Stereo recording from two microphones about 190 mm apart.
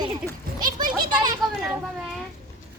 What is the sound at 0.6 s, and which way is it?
Speech, 20° right (ahead or behind).